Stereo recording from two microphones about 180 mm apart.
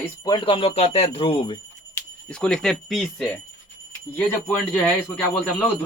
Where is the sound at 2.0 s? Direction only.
5° left (ahead or behind).